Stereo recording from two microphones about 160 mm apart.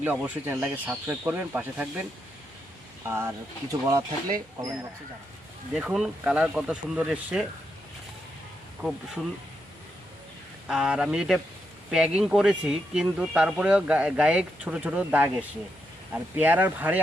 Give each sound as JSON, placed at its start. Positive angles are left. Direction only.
{"t": 0.0, "sound": "speech", "side_deg": -10}
{"t": 3.1, "sound": "speech", "side_deg": -15}
{"t": 5.7, "sound": "speech", "side_deg": 0}
{"t": 8.8, "sound": "speech", "side_deg": -5}
{"t": 10.7, "sound": "speech", "side_deg": -5}